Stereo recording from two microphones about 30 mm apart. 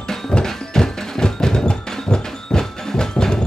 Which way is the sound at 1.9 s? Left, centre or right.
Left.